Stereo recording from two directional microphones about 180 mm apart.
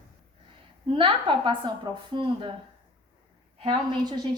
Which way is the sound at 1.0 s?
30° right (ahead or behind).